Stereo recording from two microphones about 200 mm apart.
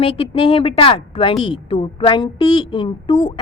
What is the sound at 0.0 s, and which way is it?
A woman's voice, 25° left (ahead or behind).